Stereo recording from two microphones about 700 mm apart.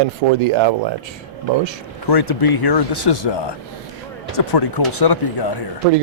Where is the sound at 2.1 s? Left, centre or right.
Left.